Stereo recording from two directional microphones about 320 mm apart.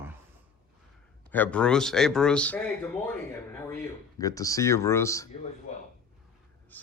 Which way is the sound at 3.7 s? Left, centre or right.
Centre.